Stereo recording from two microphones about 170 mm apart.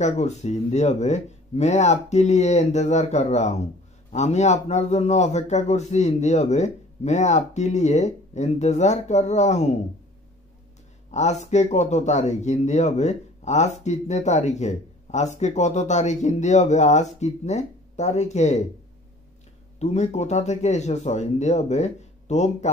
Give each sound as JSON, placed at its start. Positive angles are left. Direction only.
{"t": 0.0, "sound": "a man's voice", "side_deg": 40}
{"t": 11.1, "sound": "speech", "side_deg": 40}
{"t": 19.8, "sound": "a man's voice", "side_deg": 40}